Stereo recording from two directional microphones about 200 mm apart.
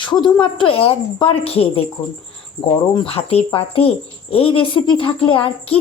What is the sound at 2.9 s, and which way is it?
A woman's voice, 25° left (ahead or behind).